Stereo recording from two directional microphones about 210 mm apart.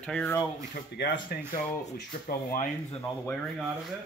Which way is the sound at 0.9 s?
55° left (ahead or behind).